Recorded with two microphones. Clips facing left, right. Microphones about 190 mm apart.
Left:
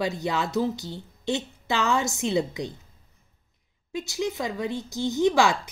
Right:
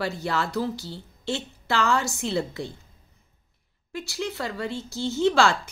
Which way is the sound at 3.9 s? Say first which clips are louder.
Left 3 dB; 20° left (ahead or behind).